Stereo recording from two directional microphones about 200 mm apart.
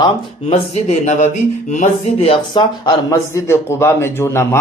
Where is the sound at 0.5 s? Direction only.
35° left (ahead or behind).